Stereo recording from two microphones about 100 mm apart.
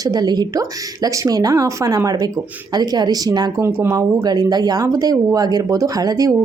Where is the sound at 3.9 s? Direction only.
45° right (ahead or behind).